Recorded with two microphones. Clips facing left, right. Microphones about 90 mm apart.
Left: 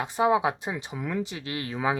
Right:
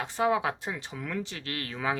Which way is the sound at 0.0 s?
20° left (ahead or behind).